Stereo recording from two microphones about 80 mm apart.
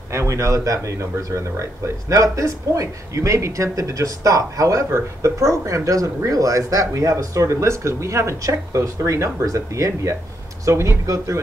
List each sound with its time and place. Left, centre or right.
0.1 s speech: right